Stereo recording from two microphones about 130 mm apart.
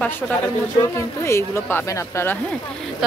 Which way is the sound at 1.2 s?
20° left (ahead or behind).